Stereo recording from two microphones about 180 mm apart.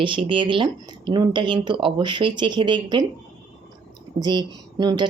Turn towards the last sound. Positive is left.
turn(degrees=-25)  # may be behind; listen again after turning